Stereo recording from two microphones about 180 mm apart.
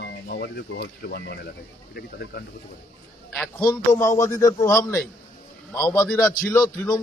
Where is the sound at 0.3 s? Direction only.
60° left (ahead or behind).